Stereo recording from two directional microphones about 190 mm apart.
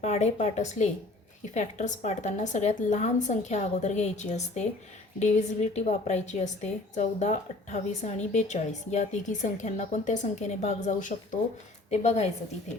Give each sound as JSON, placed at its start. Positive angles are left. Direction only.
{"t": 0.0, "sound": "a woman's voice", "side_deg": 35}